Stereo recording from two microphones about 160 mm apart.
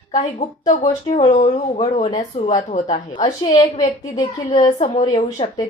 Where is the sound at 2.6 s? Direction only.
50° left (ahead or behind).